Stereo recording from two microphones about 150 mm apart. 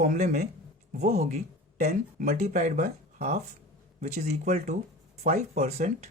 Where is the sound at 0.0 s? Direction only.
65° right (ahead or behind).